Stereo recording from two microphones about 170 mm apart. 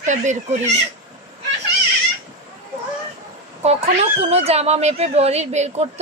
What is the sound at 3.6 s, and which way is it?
Speech, 40° right (ahead or behind).